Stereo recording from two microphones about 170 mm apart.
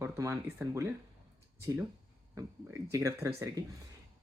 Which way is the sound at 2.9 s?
15° right (ahead or behind).